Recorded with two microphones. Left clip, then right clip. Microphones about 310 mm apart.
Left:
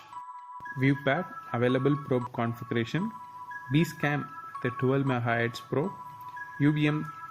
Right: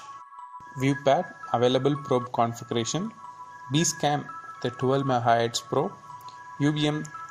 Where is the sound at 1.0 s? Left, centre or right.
Right.